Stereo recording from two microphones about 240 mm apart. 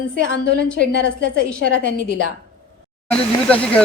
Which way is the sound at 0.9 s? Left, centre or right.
Left.